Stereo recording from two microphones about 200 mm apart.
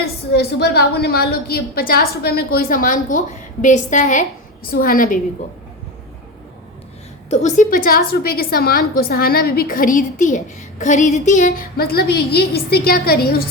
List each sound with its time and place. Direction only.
0.0 s a woman's voice: 50° left (ahead or behind)
7.3 s a woman's voice: 35° left (ahead or behind)